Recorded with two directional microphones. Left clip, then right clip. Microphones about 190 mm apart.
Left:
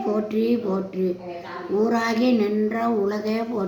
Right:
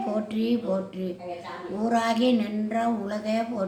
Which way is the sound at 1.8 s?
10° right (ahead or behind).